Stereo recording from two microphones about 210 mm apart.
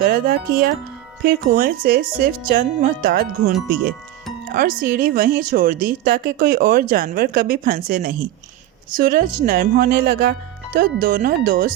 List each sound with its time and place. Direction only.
0.0 s a woman's voice: 45° right (ahead or behind)
4.5 s a woman's voice: 40° right (ahead or behind)